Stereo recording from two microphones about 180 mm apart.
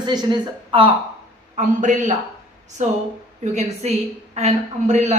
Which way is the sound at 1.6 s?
45° right (ahead or behind).